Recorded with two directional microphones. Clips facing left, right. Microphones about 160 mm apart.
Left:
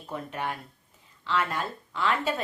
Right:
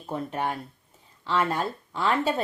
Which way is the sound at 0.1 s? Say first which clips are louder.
Right 4 dB; 35° right (ahead or behind).